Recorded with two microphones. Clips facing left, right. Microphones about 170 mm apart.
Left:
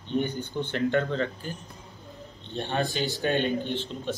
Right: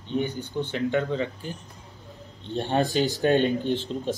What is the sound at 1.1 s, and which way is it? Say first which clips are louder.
Speech: right 1 dB; 15° right (ahead or behind).